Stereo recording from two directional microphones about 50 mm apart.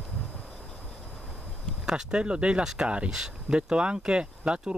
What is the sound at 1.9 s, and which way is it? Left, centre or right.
Speech, centre.